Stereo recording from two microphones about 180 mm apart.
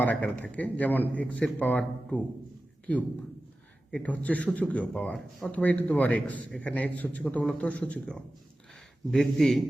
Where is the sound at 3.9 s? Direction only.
10° left (ahead or behind).